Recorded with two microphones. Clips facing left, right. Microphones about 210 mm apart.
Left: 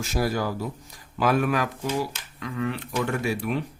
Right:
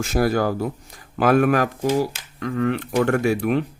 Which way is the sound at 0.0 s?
55° right (ahead or behind).